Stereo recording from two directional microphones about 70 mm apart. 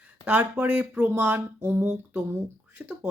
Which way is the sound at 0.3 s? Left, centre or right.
Right.